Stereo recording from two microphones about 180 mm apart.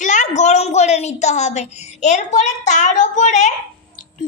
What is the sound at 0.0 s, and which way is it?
A woman's voice, 40° left (ahead or behind).